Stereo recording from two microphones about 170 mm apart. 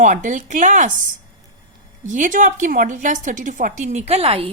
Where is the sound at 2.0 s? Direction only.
50° right (ahead or behind).